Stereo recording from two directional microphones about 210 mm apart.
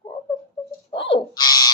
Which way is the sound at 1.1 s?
20° left (ahead or behind).